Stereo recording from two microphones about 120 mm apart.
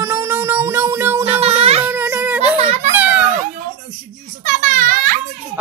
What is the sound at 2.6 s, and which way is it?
Children playing, 65° right (ahead or behind).